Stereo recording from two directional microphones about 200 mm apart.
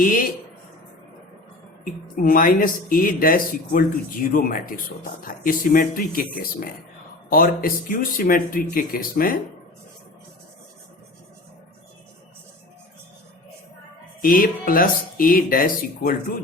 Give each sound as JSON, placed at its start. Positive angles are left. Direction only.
{"t": 0.0, "sound": "speech", "side_deg": 40}
{"t": 1.8, "sound": "speech", "side_deg": 45}
{"t": 14.2, "sound": "speech", "side_deg": 45}